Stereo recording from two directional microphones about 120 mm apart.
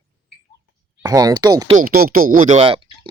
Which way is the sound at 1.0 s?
30° right (ahead or behind).